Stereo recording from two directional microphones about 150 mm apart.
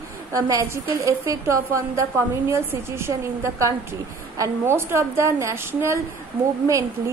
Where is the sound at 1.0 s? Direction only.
20° right (ahead or behind).